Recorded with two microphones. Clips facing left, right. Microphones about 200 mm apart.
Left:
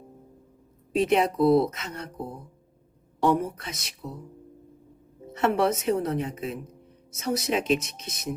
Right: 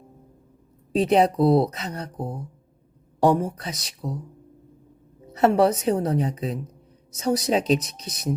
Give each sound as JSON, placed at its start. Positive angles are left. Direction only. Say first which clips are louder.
{"t": 0.9, "sound": "speech", "louder": "right 3 dB", "side_deg": -35}
{"t": 3.4, "sound": "speech", "louder": "right 3 dB", "side_deg": -35}
{"t": 5.4, "sound": "speech", "louder": "right 5 dB", "side_deg": -35}